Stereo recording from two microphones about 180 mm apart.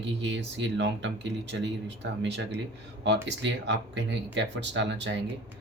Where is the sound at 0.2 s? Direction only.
80° right.